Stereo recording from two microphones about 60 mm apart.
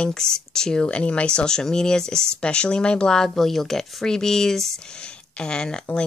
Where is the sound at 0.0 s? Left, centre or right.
Centre.